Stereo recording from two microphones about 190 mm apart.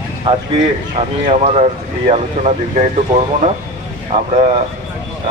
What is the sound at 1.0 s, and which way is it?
Speech, 35° right (ahead or behind).